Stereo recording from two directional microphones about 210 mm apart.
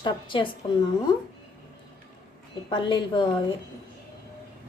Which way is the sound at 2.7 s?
20° left (ahead or behind).